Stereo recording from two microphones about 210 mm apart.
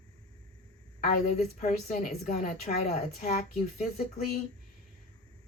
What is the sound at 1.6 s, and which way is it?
Speech, 40° left (ahead or behind).